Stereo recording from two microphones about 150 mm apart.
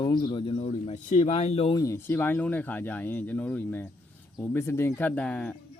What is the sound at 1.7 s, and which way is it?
Speech, 20° left (ahead or behind).